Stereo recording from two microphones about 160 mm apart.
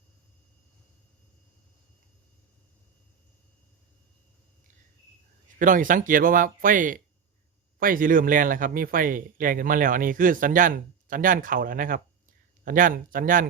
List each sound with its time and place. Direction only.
5.5 s speech: 55° right (ahead or behind)